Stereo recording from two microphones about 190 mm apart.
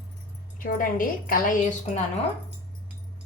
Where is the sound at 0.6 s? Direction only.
45° left (ahead or behind).